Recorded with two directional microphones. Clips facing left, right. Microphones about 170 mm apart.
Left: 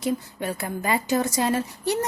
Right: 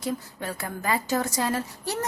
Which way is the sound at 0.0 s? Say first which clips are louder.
Left 4 dB; 20° left (ahead or behind).